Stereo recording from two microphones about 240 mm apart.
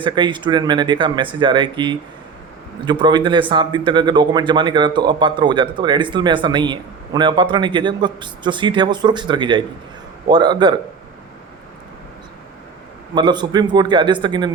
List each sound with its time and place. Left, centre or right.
0.0 s speech: centre
13.1 s speech: centre